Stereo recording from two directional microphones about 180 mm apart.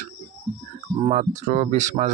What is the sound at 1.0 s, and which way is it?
Speech, 40° right (ahead or behind).